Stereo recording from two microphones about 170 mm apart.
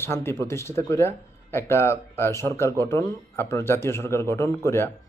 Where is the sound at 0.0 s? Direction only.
15° left (ahead or behind).